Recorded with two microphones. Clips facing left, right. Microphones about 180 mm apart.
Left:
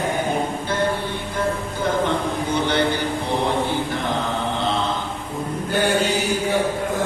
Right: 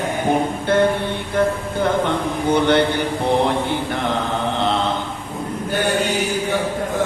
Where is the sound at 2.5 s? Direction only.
60° right (ahead or behind).